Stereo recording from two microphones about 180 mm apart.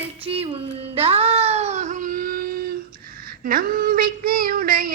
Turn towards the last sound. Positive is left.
turn(degrees=-55)  # may be behind; listen again after turning